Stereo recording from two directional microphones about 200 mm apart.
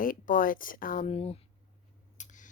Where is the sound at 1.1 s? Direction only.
30° left (ahead or behind).